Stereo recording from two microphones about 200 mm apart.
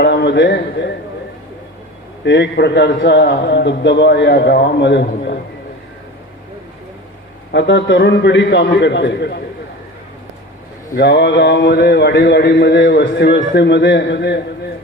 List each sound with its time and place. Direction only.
0.0 s speech: 60° left (ahead or behind)
2.2 s a man's voice: 60° left (ahead or behind)
7.5 s a man's voice: 60° left (ahead or behind)
10.9 s a man's voice: 60° left (ahead or behind)